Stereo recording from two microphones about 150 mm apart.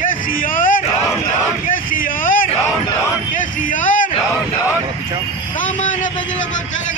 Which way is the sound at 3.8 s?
60° left (ahead or behind).